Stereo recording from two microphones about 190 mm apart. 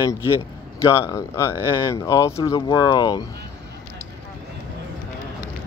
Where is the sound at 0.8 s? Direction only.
15° left (ahead or behind).